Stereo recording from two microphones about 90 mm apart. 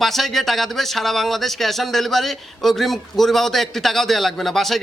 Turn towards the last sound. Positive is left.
turn(degrees=0)  # may be behind; listen again after turning